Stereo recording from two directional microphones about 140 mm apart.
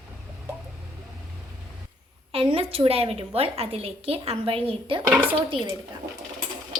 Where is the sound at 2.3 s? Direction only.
40° right (ahead or behind).